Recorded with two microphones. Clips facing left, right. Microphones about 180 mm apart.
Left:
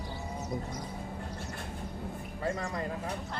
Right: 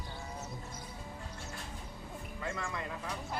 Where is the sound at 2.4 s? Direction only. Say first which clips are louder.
Left 6 dB; 35° left (ahead or behind).